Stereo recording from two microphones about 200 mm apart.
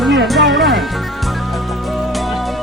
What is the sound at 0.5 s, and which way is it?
Music, centre (ahead or behind).